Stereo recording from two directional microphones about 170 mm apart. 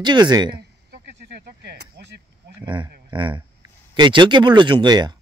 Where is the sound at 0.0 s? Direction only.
25° right (ahead or behind).